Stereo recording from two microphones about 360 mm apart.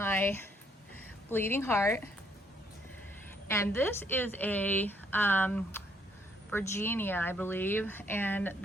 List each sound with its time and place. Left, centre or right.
0.0 s a sound: centre
1.3 s a woman's voice: centre
3.5 s a woman's voice: centre